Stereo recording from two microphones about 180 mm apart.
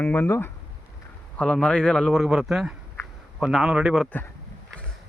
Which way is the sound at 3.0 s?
15° left (ahead or behind).